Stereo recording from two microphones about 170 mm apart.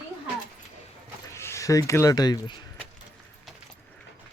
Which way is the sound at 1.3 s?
15° left (ahead or behind).